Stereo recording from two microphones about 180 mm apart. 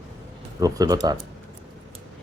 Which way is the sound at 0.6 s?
20° right (ahead or behind).